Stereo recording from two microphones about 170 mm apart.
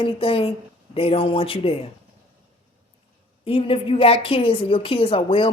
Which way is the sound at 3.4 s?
35° left (ahead or behind).